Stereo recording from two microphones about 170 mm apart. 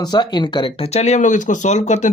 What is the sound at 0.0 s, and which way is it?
Speech, 25° left (ahead or behind).